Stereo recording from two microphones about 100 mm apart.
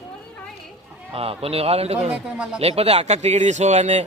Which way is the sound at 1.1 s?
75° right (ahead or behind).